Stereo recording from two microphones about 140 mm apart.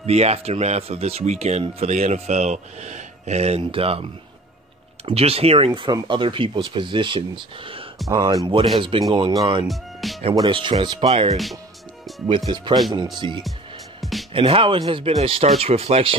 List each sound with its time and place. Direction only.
0.0 s speech: 50° right (ahead or behind)
5.8 s speech: 35° right (ahead or behind)
8.1 s speech: 25° right (ahead or behind)
8.7 s speech: 40° right (ahead or behind)
9.7 s speech: centre (ahead or behind)
10.3 s speech: 35° right (ahead or behind)
12.3 s speech: 35° right (ahead or behind)